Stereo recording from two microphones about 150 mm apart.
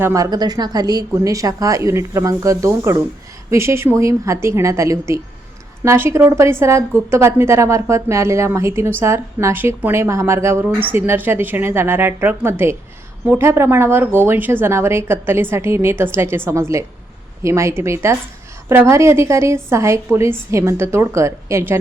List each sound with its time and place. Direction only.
0.0 s a woman's voice: 20° right (ahead or behind)